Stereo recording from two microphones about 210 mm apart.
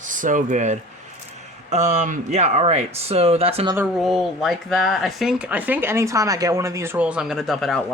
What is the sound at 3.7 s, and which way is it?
Speech, 5° right (ahead or behind).